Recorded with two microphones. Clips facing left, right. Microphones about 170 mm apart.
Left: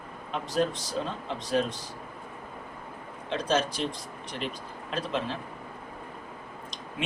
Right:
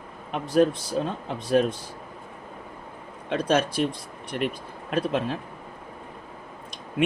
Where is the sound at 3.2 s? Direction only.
60° right (ahead or behind).